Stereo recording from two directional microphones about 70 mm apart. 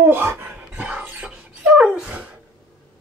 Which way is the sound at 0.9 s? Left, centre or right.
Centre.